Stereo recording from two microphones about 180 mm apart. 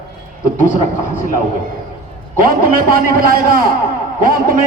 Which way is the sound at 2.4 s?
50° right (ahead or behind).